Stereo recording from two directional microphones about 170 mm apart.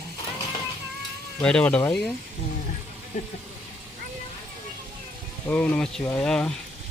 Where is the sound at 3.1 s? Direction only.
45° left (ahead or behind).